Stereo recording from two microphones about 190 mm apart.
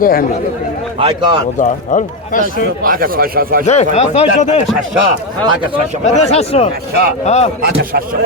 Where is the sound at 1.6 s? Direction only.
40° left (ahead or behind).